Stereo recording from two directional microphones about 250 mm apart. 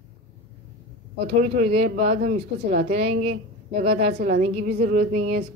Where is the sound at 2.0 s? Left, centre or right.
Right.